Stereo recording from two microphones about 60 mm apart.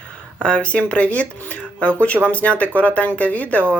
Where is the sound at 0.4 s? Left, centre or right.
Centre.